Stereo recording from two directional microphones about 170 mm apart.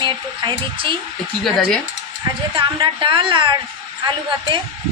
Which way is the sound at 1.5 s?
Centre (ahead or behind).